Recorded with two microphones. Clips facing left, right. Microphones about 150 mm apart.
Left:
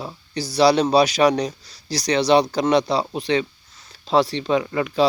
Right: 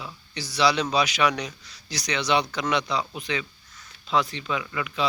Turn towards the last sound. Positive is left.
turn(degrees=40)  # may be behind; listen again after turning